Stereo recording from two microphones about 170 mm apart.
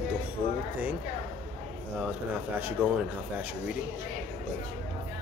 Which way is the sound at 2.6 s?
10° right (ahead or behind).